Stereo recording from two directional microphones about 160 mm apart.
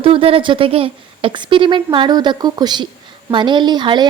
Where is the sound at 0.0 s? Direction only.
35° right (ahead or behind).